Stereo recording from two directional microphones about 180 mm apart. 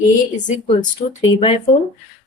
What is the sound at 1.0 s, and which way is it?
Speech, 40° left (ahead or behind).